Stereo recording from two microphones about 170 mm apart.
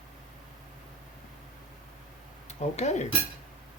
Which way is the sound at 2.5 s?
40° left (ahead or behind).